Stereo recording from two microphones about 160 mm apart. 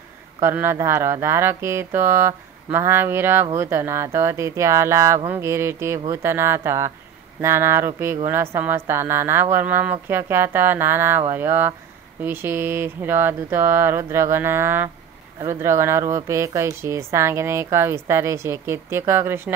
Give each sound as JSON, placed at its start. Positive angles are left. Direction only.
{"t": 0.4, "sound": "speech", "side_deg": -15}